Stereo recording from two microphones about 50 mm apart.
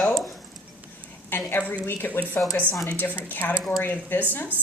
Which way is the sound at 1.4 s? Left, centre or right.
Left.